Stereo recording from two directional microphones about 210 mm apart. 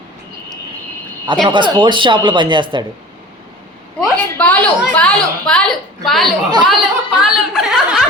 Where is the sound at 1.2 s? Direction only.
20° right (ahead or behind).